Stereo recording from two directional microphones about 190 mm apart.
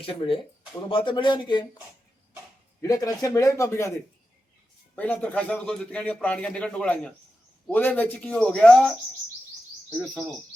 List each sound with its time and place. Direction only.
0.0 s speech: 30° left (ahead or behind)
2.8 s a man's voice: 20° left (ahead or behind)
4.9 s a man's voice: 10° left (ahead or behind)